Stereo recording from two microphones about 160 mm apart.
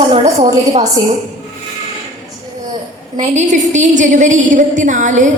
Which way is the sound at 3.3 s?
50° right (ahead or behind).